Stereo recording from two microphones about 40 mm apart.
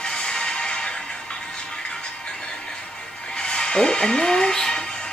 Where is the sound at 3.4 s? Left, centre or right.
Left.